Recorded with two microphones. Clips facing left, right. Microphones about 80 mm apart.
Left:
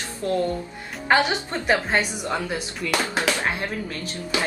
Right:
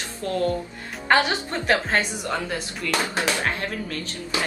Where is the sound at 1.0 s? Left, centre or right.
Centre.